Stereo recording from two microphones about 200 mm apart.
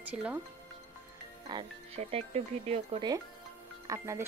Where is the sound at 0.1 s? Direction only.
5° right (ahead or behind).